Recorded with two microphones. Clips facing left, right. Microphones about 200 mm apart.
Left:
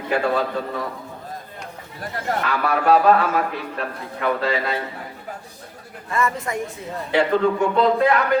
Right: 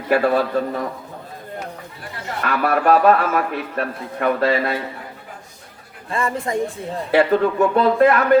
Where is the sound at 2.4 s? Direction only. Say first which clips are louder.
Right 5 dB; 55° right (ahead or behind).